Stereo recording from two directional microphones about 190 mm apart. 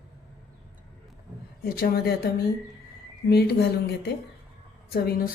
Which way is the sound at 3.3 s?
60° left (ahead or behind).